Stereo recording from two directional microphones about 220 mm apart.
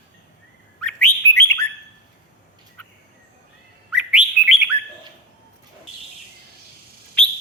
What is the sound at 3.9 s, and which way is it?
Bird, 5° right (ahead or behind).